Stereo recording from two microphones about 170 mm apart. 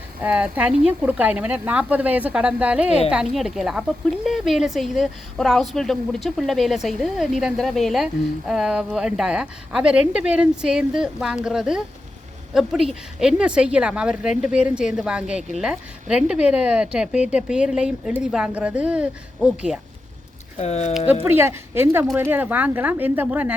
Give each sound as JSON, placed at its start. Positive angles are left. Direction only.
{"t": 0.2, "sound": "speech", "side_deg": -10}
{"t": 20.6, "sound": "speech", "side_deg": 40}
{"t": 21.2, "sound": "speech", "side_deg": -15}